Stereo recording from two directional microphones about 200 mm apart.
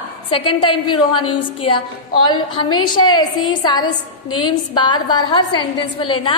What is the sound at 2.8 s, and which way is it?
Speech, 90° left.